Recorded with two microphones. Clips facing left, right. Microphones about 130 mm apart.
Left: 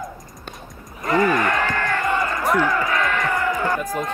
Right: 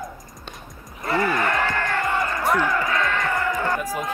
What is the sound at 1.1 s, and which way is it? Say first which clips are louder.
Music: left 4 dB; 50° left (ahead or behind).